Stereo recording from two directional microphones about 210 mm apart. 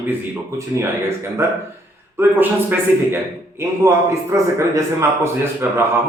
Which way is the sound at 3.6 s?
15° right (ahead or behind).